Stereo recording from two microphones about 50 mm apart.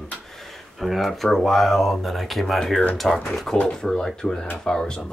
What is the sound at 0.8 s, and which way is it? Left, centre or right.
Speech, centre.